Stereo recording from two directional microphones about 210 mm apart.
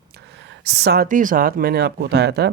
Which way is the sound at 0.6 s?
50° right (ahead or behind).